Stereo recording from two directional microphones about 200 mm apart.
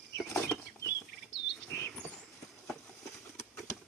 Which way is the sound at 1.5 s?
5° left (ahead or behind).